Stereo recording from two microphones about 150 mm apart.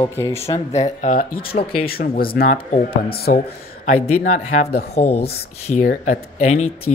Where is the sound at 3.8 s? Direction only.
45° left (ahead or behind).